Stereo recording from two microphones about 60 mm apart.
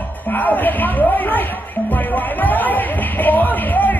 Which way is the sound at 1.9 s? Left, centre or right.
Left.